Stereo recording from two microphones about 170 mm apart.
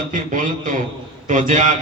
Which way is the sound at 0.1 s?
50° right (ahead or behind).